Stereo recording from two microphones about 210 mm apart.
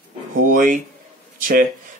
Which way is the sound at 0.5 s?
40° right (ahead or behind).